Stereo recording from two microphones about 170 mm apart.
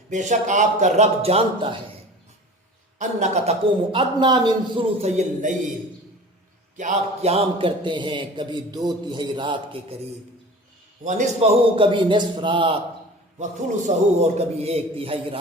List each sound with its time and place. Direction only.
0.1 s a man's voice: 45° right (ahead or behind)
3.0 s a man's voice: 45° right (ahead or behind)
3.9 s a man's voice: 25° right (ahead or behind); by 5.7 s 45° right (ahead or behind)
6.7 s a man's voice: 45° right (ahead or behind)
11.0 s a man's voice: 45° right (ahead or behind); by 12.8 s 30° right (ahead or behind)
13.4 s a man's voice: 45° right (ahead or behind)